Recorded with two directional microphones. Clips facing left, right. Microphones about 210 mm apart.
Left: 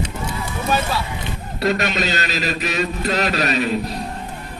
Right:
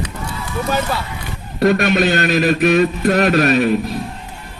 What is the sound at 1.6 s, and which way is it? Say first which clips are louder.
A man's voice: right 6 dB; 55° right (ahead or behind).